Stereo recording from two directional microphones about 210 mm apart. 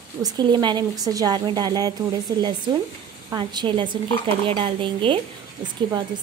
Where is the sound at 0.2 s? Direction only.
20° right (ahead or behind).